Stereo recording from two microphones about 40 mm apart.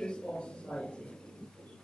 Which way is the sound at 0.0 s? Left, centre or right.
Left.